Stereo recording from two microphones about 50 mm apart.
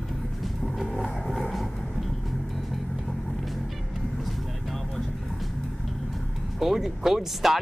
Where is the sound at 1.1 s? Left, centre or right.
Centre.